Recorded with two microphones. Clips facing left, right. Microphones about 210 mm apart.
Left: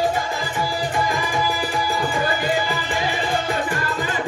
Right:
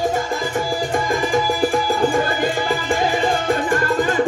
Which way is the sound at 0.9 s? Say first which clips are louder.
Right 7 dB; 50° right (ahead or behind).